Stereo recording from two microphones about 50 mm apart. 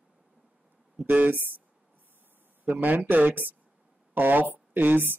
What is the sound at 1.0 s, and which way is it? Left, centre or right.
Speech, right.